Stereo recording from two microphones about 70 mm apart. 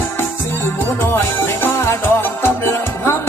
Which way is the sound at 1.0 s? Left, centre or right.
Left.